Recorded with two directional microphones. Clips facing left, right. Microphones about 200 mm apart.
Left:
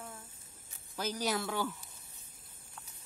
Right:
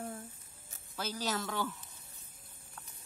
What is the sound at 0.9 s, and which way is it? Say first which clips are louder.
Speech: left 2 dB; 15° left (ahead or behind).